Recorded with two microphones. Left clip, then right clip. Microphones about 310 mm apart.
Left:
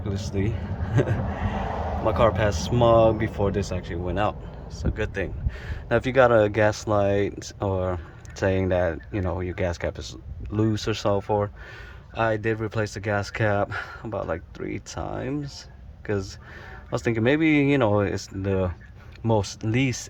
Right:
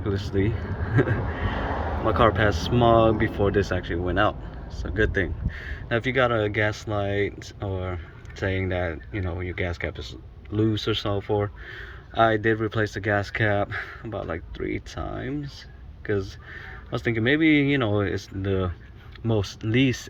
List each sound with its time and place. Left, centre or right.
0.0 s speech: centre
2.0 s speech: centre